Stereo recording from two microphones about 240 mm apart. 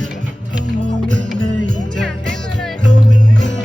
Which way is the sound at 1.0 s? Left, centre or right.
Centre.